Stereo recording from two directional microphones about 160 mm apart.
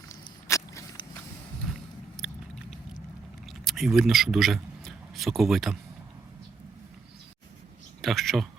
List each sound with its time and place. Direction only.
0.1 s walk: 20° left (ahead or behind)
1.7 s biting: centre (ahead or behind)
3.4 s a sound: centre (ahead or behind)
8.0 s speech: centre (ahead or behind)